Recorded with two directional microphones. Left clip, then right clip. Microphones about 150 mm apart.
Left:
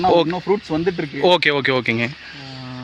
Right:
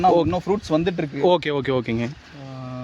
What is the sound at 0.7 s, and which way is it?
Speech, 50° right (ahead or behind).